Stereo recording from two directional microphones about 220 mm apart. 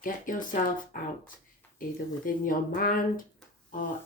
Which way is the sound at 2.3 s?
40° left (ahead or behind).